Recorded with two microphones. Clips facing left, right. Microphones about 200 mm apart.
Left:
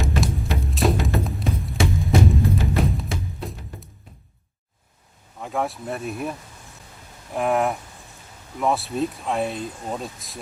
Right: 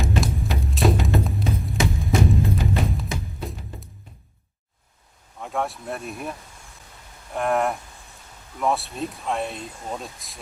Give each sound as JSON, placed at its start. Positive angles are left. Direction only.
{"t": 0.2, "sound": "music", "side_deg": 0}
{"t": 5.4, "sound": "speech", "side_deg": 0}
{"t": 7.3, "sound": "speech", "side_deg": 0}